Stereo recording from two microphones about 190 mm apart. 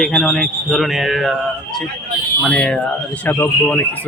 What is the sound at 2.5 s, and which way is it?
Speech, 5° left (ahead or behind).